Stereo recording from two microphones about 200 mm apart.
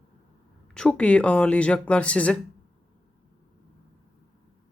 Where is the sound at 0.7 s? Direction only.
5° left (ahead or behind).